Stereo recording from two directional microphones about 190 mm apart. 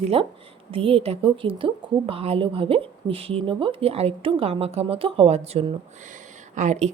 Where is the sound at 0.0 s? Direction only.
30° right (ahead or behind).